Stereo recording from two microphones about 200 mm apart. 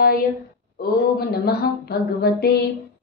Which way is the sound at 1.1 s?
50° left (ahead or behind).